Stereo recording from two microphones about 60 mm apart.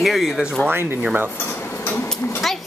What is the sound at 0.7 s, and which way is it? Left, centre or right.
Speech, right.